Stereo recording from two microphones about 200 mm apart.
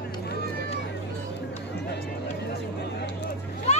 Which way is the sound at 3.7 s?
35° left (ahead or behind).